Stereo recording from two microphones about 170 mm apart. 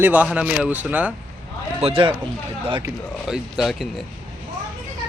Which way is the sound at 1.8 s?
30° right (ahead or behind).